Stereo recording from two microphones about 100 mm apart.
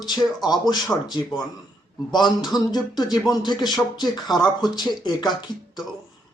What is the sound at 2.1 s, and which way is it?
Speech, 45° left (ahead or behind).